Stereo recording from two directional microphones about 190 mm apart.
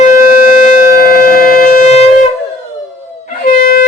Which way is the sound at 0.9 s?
50° left (ahead or behind).